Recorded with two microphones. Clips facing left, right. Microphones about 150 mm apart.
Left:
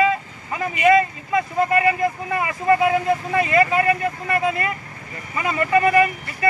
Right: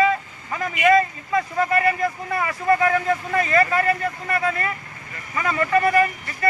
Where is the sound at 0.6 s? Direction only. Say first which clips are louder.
Left 1 dB; 15° left (ahead or behind).